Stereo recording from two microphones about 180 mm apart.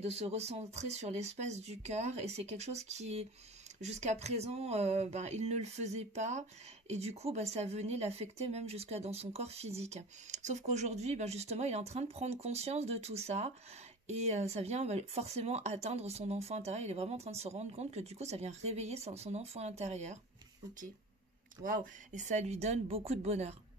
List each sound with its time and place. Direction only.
0.0 s a woman's voice: 35° right (ahead or behind)
21.6 s a woman's voice: 45° right (ahead or behind)